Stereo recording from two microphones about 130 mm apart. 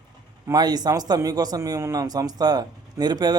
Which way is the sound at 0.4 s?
30° right (ahead or behind).